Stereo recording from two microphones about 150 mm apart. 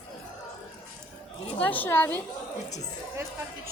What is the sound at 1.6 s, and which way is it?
Speech, 10° left (ahead or behind).